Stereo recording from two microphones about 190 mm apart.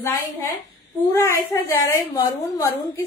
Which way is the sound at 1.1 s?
15° left (ahead or behind).